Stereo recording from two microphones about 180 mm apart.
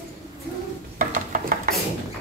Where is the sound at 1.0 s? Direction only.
50° right (ahead or behind).